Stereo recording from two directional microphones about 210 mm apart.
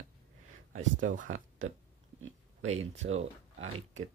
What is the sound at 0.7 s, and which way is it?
Speech, 40° right (ahead or behind).